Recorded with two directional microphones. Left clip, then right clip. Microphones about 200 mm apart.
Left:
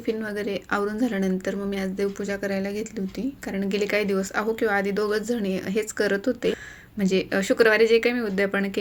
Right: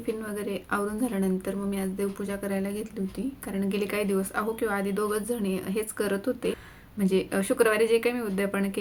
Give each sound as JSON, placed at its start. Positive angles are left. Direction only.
{"t": 0.0, "sound": "a woman's voice", "side_deg": 25}